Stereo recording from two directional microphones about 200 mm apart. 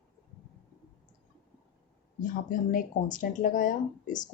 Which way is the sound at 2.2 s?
45° left (ahead or behind).